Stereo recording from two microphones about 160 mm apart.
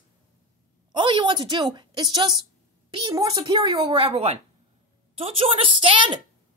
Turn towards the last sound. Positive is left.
turn(degrees=-30)  # may be behind; listen again after turning